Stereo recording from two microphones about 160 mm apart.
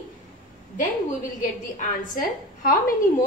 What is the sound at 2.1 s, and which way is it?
Speech, 55° left (ahead or behind).